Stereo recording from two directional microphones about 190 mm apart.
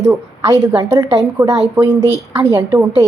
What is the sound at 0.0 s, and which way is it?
A woman's voice, 15° right (ahead or behind).